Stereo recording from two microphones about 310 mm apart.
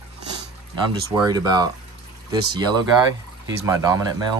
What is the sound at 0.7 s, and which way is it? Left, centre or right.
Speech, centre.